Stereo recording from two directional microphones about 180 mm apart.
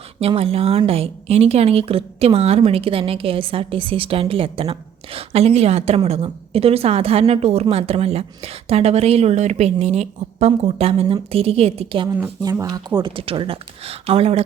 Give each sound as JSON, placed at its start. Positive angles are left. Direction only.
{"t": 0.2, "sound": "speech", "side_deg": -35}
{"t": 12.1, "sound": "speech", "side_deg": -15}